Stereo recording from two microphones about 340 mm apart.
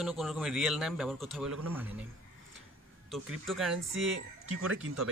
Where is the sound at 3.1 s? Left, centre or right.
Centre.